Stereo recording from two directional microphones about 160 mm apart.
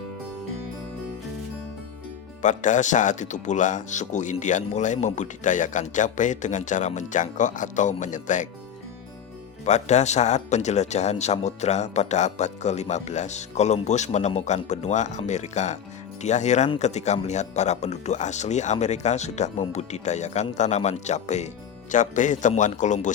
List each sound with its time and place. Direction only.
2.4 s speech: 50° left (ahead or behind)
9.6 s speech: 45° left (ahead or behind)